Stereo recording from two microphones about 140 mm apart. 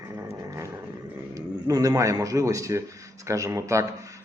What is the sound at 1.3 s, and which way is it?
A man's voice, 25° right (ahead or behind).